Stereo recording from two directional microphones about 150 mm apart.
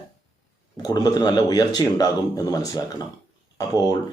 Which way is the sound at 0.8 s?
25° left (ahead or behind).